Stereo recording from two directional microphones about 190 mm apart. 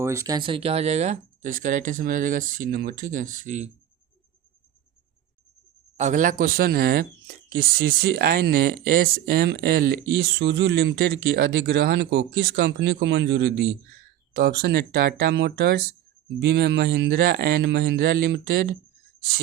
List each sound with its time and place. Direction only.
0.0 s speech: 15° right (ahead or behind); by 3.7 s 40° right (ahead or behind)
6.0 s speech: 40° right (ahead or behind); by 13.7 s 70° right (ahead or behind)
14.3 s speech: 55° right (ahead or behind)